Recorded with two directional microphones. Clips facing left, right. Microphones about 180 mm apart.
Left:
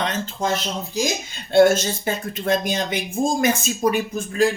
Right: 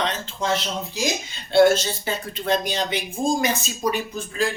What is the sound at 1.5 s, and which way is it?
Speech, 45° left (ahead or behind).